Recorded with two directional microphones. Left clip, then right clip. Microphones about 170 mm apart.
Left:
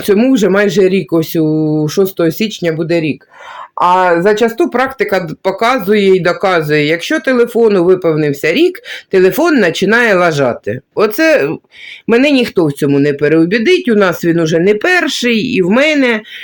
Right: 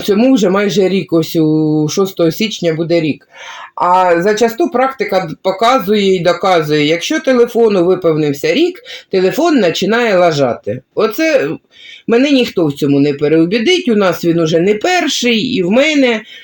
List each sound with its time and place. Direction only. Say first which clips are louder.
0.0 s speech: left 1 dB; centre (ahead or behind)
3.8 s speech: left 1 dB; 30° left (ahead or behind)
4.4 s speech: even; 15° left (ahead or behind)